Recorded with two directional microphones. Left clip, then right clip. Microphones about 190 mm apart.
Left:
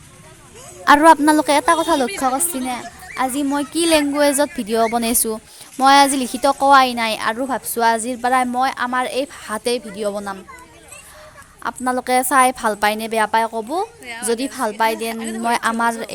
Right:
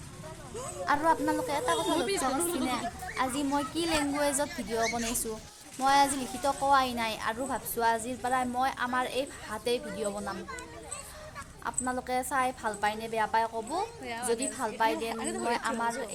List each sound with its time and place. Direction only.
0.9 s a woman's voice: 50° left (ahead or behind)
3.2 s a woman's voice: 45° left (ahead or behind)
11.6 s a woman's voice: 50° left (ahead or behind)
14.0 s a woman's voice: centre (ahead or behind)
14.3 s a woman's voice: 45° left (ahead or behind)
15.1 s a woman's voice: centre (ahead or behind)
15.4 s a woman's voice: 50° left (ahead or behind)